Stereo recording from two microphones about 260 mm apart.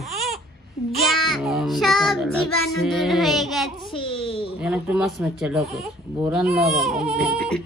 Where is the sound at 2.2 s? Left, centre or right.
Left.